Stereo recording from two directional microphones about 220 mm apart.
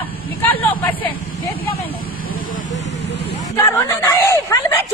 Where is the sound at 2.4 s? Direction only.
40° left (ahead or behind).